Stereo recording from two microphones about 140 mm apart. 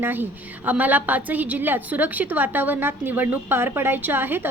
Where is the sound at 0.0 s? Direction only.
15° right (ahead or behind).